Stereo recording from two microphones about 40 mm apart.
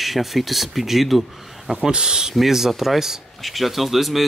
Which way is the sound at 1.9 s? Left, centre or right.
Centre.